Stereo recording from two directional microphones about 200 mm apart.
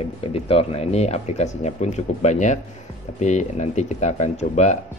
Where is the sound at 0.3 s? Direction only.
30° left (ahead or behind).